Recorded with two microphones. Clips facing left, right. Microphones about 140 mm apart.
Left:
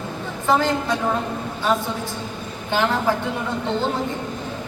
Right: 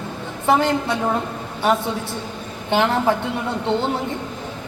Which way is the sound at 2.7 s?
20° right (ahead or behind).